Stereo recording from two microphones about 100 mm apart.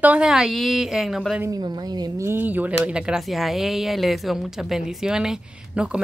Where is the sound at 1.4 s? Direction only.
40° right (ahead or behind).